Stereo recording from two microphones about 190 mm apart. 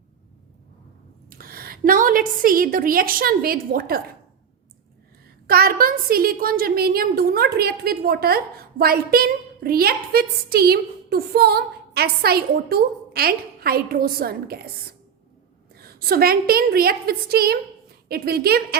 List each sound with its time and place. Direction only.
1.3 s a woman's voice: 50° right (ahead or behind)
5.5 s a woman's voice: 50° right (ahead or behind)
15.7 s a woman's voice: 55° right (ahead or behind)